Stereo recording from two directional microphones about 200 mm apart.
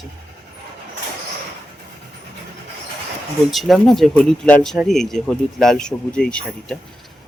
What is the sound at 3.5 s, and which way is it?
Speech, centre (ahead or behind).